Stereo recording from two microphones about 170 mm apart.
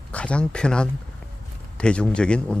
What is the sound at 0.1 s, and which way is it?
Speech, 5° left (ahead or behind).